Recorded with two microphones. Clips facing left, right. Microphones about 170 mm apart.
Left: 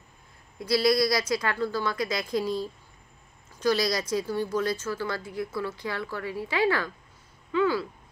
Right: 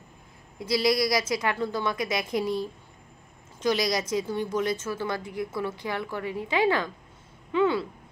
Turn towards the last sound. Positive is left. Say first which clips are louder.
# right 1 dB
turn(degrees=-25)  # may be behind; listen again after turning